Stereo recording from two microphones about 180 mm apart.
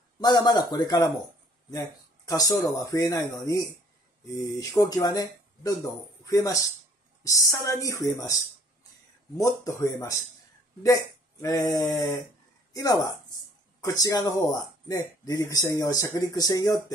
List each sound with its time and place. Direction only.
0.2 s speech: 25° left (ahead or behind)
4.6 s speech: 20° left (ahead or behind)
9.9 s speech: 20° left (ahead or behind)